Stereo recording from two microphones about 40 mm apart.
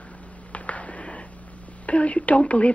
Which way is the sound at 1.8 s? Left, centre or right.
Left.